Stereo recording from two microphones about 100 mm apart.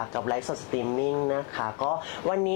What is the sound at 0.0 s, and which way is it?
A woman's voice, 25° left (ahead or behind).